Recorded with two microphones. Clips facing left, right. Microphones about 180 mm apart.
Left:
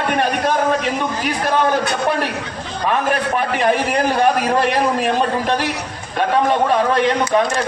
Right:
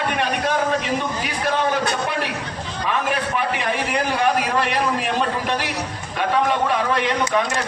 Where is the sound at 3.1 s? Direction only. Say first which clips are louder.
Left 4 dB; 45° left (ahead or behind).